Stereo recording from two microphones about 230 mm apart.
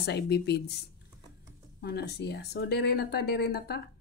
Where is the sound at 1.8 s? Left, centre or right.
Left.